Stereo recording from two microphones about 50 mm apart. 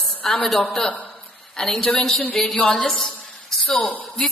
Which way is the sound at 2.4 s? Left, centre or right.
Left.